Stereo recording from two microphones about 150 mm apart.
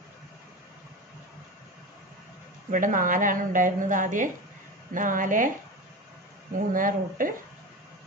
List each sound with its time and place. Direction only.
2.7 s a woman's voice: 65° right (ahead or behind)
6.7 s a woman's voice: 65° right (ahead or behind)